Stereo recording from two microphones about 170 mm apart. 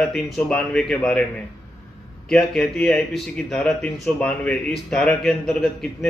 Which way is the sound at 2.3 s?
5° left (ahead or behind).